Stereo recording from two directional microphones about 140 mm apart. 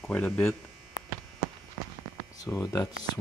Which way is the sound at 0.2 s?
15° left (ahead or behind).